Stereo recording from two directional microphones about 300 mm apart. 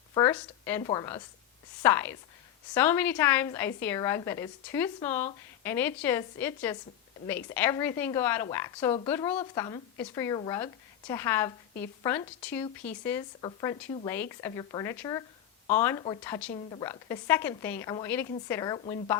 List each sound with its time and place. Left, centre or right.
0.1 s a woman's voice: centre